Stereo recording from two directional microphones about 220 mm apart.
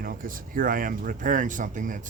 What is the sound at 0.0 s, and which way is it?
A man's voice, 40° right (ahead or behind).